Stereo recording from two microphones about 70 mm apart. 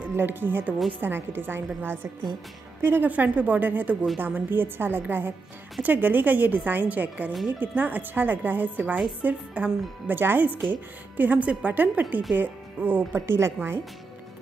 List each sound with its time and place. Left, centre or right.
0.1 s a woman's voice: right
2.8 s a woman's voice: right